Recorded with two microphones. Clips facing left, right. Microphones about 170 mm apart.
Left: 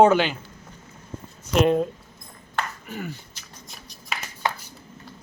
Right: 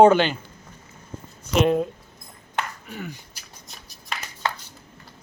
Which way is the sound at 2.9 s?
Centre (ahead or behind).